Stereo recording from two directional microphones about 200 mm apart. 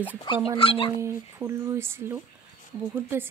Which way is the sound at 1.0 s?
15° right (ahead or behind).